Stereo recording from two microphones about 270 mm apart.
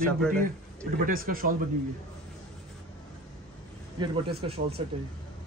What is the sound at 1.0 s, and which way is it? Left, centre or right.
Speech, right.